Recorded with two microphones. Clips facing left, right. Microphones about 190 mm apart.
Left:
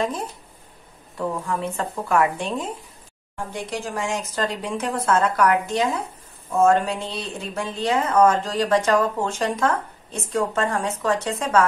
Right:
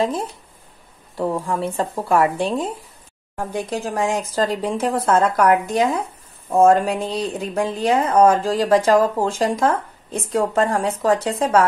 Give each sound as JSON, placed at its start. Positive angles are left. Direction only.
{"t": 1.1, "sound": "speech", "side_deg": -30}